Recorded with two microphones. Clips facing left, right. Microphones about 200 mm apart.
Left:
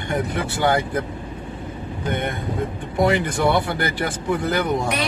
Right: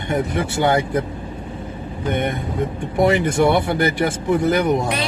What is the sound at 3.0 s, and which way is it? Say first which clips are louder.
Speech: right 3 dB; 25° right (ahead or behind).